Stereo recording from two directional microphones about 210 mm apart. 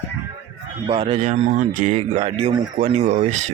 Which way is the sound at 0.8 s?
25° right (ahead or behind).